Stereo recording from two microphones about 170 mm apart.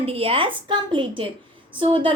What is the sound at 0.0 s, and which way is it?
A woman's voice, 35° right (ahead or behind).